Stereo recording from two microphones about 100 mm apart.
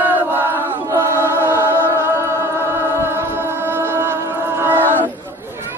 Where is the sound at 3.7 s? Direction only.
25° right (ahead or behind).